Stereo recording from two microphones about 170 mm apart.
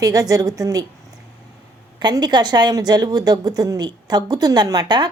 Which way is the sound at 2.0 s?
25° right (ahead or behind).